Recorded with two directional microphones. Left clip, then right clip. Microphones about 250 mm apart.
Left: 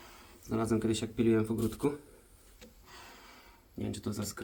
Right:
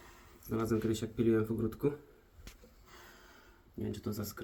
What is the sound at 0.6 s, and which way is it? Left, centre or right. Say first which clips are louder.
Speech: left 2 dB; centre.